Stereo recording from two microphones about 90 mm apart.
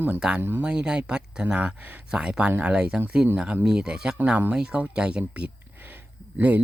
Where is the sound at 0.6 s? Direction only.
10° right (ahead or behind).